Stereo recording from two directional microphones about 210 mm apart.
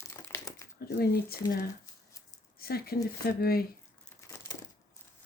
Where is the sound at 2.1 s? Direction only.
15° left (ahead or behind).